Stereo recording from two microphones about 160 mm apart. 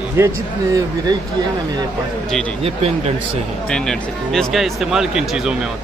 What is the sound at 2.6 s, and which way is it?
Speech, 40° right (ahead or behind).